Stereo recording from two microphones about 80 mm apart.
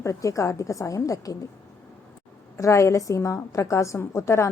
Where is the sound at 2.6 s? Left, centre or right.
Left.